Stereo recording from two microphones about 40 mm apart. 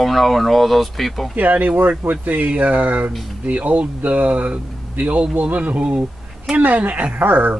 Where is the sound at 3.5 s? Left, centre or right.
Right.